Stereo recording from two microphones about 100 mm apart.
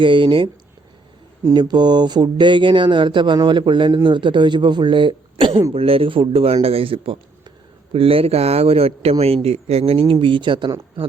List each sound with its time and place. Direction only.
0.0 s speech: 55° right (ahead or behind)
1.5 s speech: 45° right (ahead or behind)
5.7 s a man's voice: 70° right (ahead or behind); by 10.7 s 55° right (ahead or behind)